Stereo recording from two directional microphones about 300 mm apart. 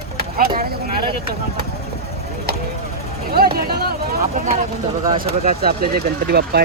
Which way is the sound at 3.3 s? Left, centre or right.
Right.